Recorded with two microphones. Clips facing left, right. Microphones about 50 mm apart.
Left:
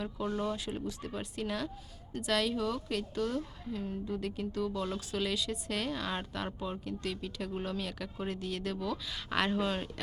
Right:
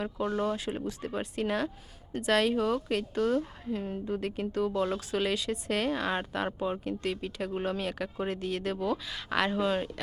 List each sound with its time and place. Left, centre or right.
0.2 s a woman's voice: centre
9.0 s speech: centre